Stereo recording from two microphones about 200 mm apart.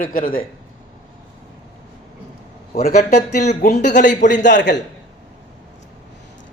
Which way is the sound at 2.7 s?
50° left (ahead or behind).